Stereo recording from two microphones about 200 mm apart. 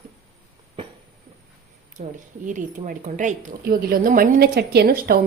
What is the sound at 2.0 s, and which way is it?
A woman's voice, 40° right (ahead or behind).